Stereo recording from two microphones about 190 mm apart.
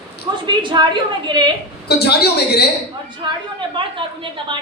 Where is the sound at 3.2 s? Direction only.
20° right (ahead or behind).